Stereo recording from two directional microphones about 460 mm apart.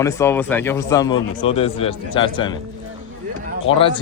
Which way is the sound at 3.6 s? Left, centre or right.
Centre.